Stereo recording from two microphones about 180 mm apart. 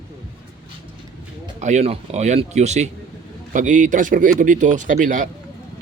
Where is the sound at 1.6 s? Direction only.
40° right (ahead or behind).